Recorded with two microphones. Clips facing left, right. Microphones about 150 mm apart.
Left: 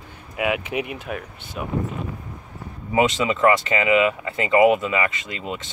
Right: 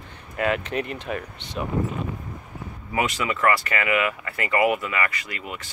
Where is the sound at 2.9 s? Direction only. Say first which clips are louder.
Left 6 dB; 20° left (ahead or behind).